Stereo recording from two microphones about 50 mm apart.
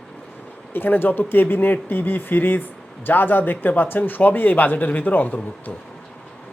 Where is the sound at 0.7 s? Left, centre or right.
Left.